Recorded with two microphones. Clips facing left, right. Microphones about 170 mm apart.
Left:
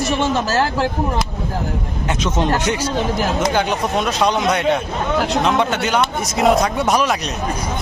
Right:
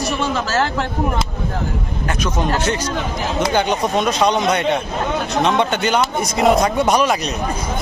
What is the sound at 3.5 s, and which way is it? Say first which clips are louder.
A man's voice: right 1 dB; centre (ahead or behind).